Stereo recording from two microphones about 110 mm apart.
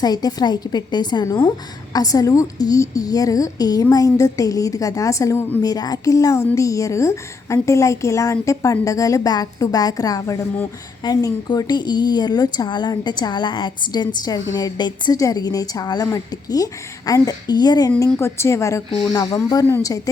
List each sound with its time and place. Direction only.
0.0 s a woman's voice: 35° left (ahead or behind)
5.6 s a woman's voice: 35° left (ahead or behind)
18.2 s a woman's voice: 25° left (ahead or behind)
19.1 s a woman's voice: 35° left (ahead or behind)